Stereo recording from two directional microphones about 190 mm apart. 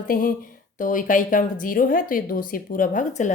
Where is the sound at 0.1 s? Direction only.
45° left (ahead or behind).